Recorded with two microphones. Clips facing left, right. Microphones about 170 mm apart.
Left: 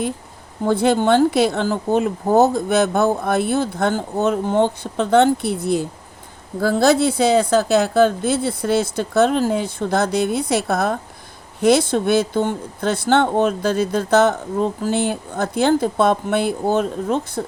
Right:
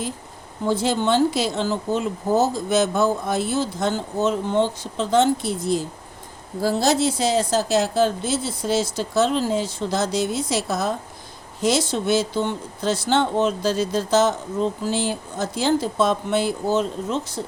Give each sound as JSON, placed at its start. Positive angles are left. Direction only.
{"t": 0.6, "sound": "speech", "side_deg": 55}